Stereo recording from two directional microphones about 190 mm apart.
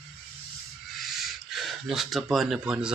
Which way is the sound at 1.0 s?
Centre (ahead or behind).